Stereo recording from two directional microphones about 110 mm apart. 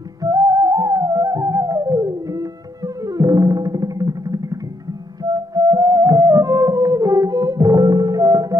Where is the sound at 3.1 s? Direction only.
35° right (ahead or behind).